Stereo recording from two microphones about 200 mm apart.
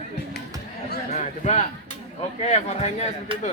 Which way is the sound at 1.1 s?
35° left (ahead or behind).